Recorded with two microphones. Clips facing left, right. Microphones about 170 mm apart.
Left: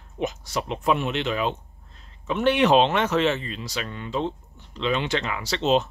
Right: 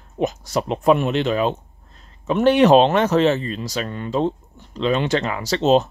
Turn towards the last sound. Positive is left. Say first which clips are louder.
# right 5 dB
turn(degrees=-40)  # may be behind; listen again after turning